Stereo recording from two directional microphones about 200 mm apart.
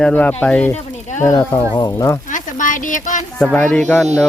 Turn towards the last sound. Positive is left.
turn(degrees=10)  # may be behind; listen again after turning